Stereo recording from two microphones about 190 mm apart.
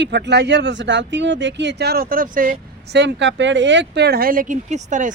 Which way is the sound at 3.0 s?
70° right (ahead or behind).